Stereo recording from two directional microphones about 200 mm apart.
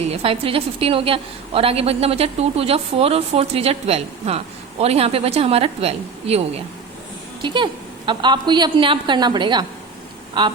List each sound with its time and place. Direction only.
0.1 s a woman's voice: 30° right (ahead or behind)
7.4 s a woman's voice: 25° right (ahead or behind)